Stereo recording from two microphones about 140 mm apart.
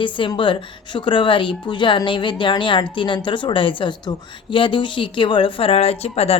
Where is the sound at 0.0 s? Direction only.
35° left (ahead or behind).